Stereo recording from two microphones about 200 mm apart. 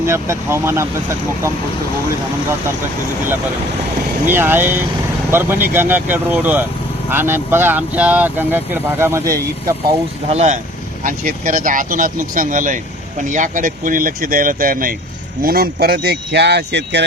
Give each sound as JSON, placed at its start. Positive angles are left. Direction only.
{"t": 0.0, "sound": "speech", "side_deg": -15}
{"t": 4.3, "sound": "speech", "side_deg": -10}
{"t": 9.9, "sound": "speech", "side_deg": -30}